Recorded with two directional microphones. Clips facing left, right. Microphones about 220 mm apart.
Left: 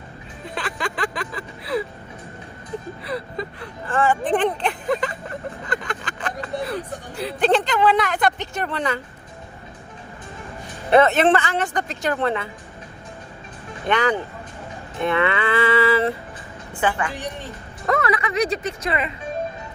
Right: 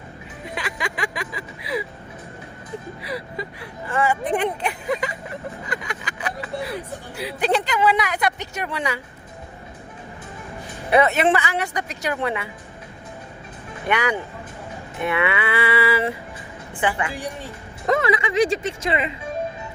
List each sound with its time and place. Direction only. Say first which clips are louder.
0.4 s speech: left 1 dB; 10° right (ahead or behind)
3.0 s music: left 2 dB; 10° right (ahead or behind)
5.6 s speech: left 3 dB; 10° right (ahead or behind)
10.9 s music: left 2 dB; 10° right (ahead or behind)
13.8 s music: left 2 dB; 10° right (ahead or behind)
17.8 s speech: right 1 dB; 25° right (ahead or behind)